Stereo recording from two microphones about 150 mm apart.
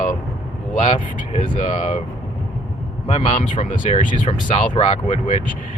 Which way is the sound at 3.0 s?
45° left (ahead or behind).